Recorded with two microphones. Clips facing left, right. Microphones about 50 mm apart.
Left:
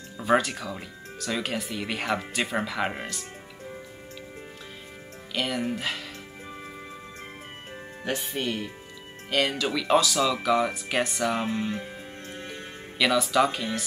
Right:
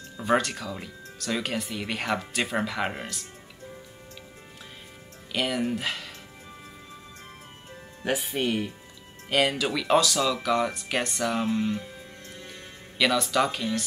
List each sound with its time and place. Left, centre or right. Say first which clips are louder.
0.2 s speech: left 1 dB; centre
5.3 s speech: right 1 dB; centre
8.0 s speech: right 3 dB; centre
11.4 s speech: right 2 dB; centre
11.8 s music: left 4 dB; left
12.9 s speech: left 1 dB; centre